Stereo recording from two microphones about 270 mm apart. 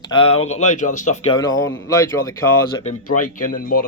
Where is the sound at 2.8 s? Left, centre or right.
Left.